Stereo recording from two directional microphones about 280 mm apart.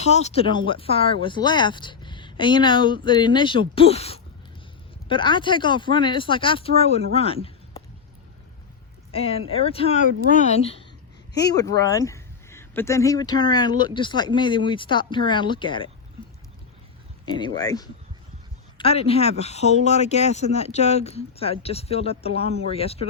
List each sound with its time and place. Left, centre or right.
0.0 s speech: left
9.1 s speech: left
17.2 s speech: centre